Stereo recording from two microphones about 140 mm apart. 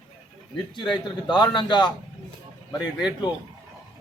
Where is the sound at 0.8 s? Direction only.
35° left (ahead or behind).